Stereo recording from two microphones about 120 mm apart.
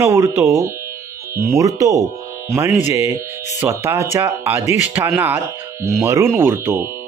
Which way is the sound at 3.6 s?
20° right (ahead or behind).